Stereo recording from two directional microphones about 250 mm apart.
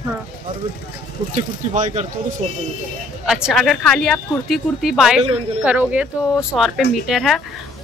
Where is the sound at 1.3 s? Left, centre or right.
Right.